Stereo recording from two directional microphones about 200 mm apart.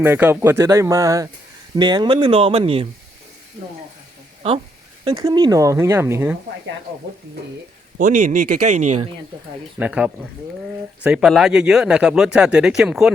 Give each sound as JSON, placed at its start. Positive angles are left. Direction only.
{"t": 0.0, "sound": "speech", "side_deg": -10}
{"t": 5.0, "sound": "speech", "side_deg": -20}
{"t": 7.9, "sound": "speech", "side_deg": -40}
{"t": 9.7, "sound": "speech", "side_deg": -5}